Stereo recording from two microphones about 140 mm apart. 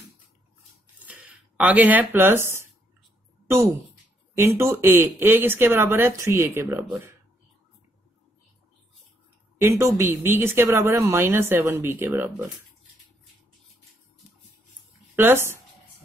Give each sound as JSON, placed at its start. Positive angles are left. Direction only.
{"t": 0.9, "sound": "a sound", "side_deg": -10}
{"t": 3.4, "sound": "speech", "side_deg": -15}
{"t": 9.6, "sound": "speech", "side_deg": -20}
{"t": 15.1, "sound": "speech", "side_deg": -15}